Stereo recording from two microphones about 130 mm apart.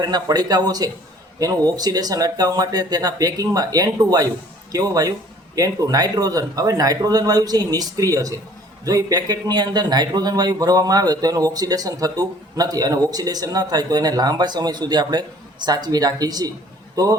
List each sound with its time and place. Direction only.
0.0 s a man's voice: 30° right (ahead or behind)